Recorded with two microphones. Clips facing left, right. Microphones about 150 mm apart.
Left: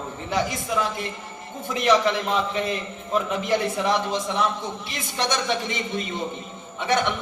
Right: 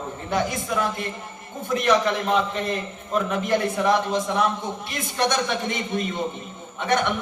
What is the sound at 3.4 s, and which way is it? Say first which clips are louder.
A man's voice: right 1 dB; 50° right (ahead or behind).